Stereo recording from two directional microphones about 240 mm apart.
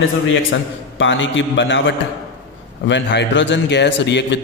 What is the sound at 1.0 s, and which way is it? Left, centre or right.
A man's voice, left.